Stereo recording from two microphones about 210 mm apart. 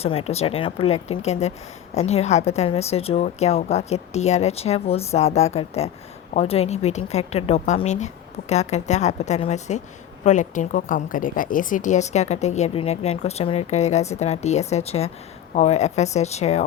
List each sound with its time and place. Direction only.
0.0 s a woman's voice: 30° left (ahead or behind)